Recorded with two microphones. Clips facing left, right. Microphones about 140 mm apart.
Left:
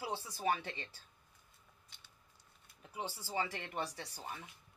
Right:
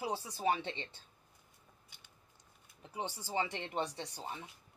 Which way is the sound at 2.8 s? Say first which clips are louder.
Right 2 dB; 20° right (ahead or behind).